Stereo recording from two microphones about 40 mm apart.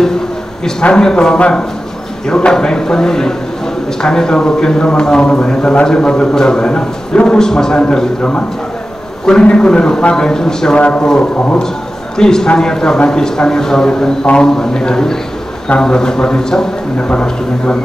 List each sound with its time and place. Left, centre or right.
0.8 s a man's voice: left
8.2 s a man's voice: left
10.8 s a man's voice: left
12.2 s a man's voice: centre